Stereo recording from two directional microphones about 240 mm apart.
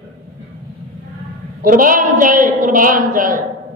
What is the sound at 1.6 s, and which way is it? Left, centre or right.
A man's voice, right.